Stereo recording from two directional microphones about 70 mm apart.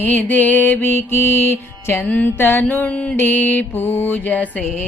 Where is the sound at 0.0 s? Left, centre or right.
Left.